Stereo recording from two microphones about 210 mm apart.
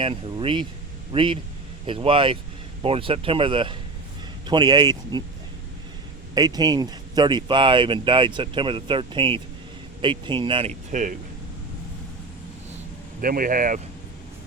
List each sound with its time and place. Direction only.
0.0 s speech: 25° right (ahead or behind)
6.3 s speech: 20° right (ahead or behind); by 11.2 s 40° right (ahead or behind)
13.2 s speech: 40° right (ahead or behind)